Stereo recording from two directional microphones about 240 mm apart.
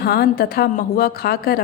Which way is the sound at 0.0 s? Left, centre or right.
Left.